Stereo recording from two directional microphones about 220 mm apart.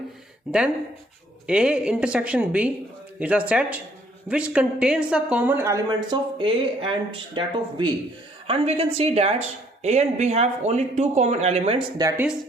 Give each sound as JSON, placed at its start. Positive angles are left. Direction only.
{"t": 0.5, "sound": "a woman's voice", "side_deg": 0}
{"t": 11.9, "sound": "a woman's voice", "side_deg": -10}